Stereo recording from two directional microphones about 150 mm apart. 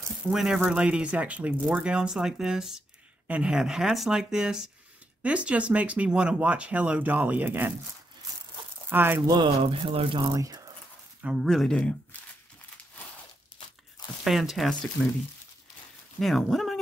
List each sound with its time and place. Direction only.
0.3 s speech: 5° right (ahead or behind)
8.9 s speech: 15° right (ahead or behind)
9.3 s speech: 35° right (ahead or behind)
11.2 s speech: centre (ahead or behind)
14.2 s speech: centre (ahead or behind)
16.2 s speech: centre (ahead or behind)